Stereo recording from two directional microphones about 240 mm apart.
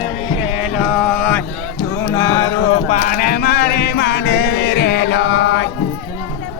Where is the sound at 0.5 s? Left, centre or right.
Centre.